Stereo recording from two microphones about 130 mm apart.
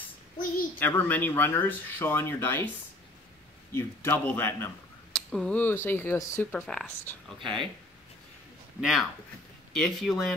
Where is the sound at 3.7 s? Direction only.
20° left (ahead or behind).